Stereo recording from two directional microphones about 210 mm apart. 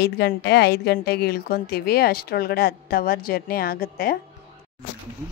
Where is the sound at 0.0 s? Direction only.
50° left (ahead or behind).